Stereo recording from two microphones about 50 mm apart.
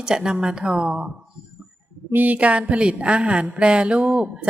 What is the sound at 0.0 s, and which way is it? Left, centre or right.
Speech, centre.